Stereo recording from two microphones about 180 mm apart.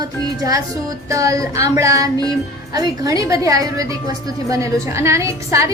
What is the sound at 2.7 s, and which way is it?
A woman's voice, 20° right (ahead or behind).